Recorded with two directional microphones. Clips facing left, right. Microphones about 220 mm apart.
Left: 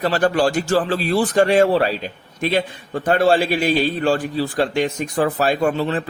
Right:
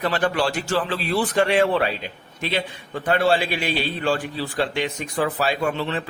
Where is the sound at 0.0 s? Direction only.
40° left (ahead or behind).